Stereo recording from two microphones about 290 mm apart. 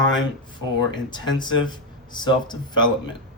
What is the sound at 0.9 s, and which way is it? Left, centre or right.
Speech, centre.